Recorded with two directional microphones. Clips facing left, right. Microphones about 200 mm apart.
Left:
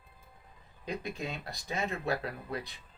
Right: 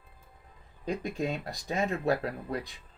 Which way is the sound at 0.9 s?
45° right (ahead or behind).